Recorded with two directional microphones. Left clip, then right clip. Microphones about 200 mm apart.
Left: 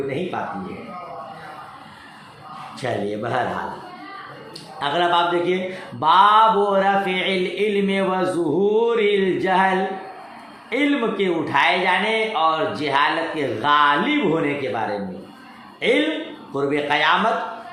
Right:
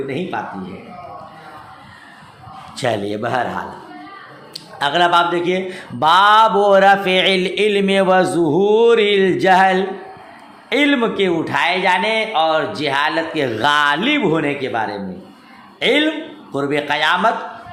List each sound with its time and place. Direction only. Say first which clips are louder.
2.7 s speech: right 5 dB; 45° right (ahead or behind)
4.8 s speech: right 5 dB; 40° right (ahead or behind)
6.0 s a man's voice: right 3 dB; 45° right (ahead or behind)